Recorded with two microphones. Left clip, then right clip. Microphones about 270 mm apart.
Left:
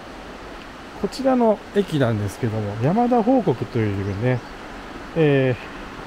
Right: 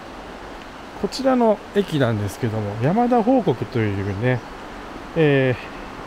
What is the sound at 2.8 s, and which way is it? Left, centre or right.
Speech, right.